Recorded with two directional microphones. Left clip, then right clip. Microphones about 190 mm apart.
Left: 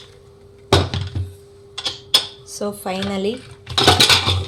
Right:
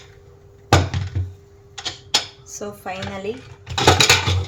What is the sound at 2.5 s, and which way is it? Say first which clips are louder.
Speech: left 5 dB; 25° left (ahead or behind).